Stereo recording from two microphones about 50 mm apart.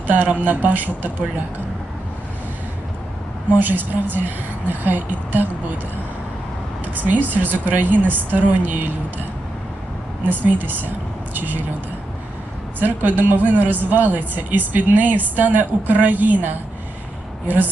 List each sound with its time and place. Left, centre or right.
0.1 s speech: right
3.5 s speech: right
6.9 s speech: right
10.2 s speech: right
12.8 s speech: right